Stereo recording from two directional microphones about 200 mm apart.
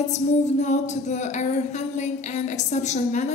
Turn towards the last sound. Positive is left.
turn(degrees=35)  # may be behind; listen again after turning